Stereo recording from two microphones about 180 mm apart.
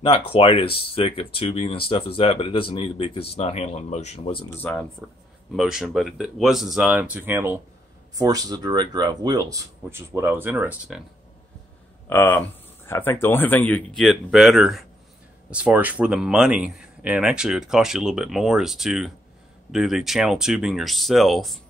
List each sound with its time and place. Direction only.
0.3 s speech: 30° left (ahead or behind)
4.6 s speech: 10° left (ahead or behind)
5.5 s speech: centre (ahead or behind)
12.1 s speech: 10° left (ahead or behind)